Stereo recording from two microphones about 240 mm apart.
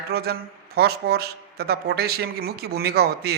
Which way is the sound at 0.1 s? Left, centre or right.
Right.